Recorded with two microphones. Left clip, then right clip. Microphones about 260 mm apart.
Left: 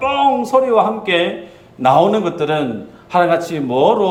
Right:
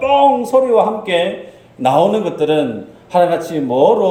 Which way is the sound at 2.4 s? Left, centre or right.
Left.